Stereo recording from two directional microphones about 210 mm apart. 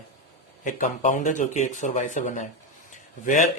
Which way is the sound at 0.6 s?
40° left (ahead or behind).